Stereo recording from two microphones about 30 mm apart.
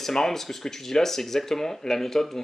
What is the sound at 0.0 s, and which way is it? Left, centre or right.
Speech, centre.